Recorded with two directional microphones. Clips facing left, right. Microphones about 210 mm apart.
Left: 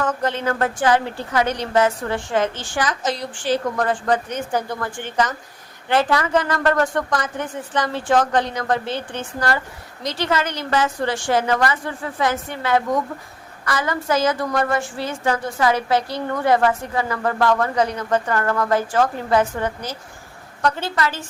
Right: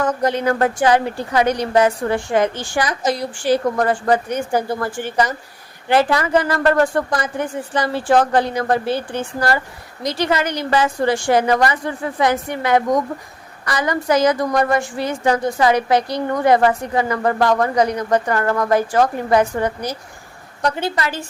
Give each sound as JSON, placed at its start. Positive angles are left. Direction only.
{"t": 0.2, "sound": "a woman's voice", "side_deg": -15}